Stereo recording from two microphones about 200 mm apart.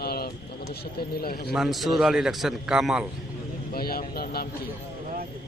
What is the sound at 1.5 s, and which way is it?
A man's voice, centre (ahead or behind).